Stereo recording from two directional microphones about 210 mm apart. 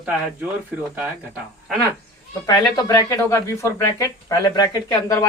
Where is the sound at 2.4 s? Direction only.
15° left (ahead or behind).